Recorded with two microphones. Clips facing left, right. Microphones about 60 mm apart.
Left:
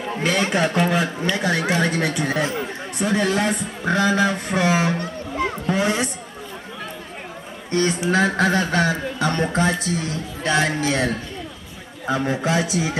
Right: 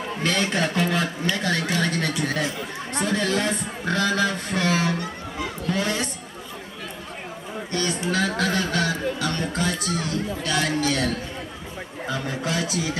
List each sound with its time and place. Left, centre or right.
0.2 s a man's voice: centre
7.7 s speech: left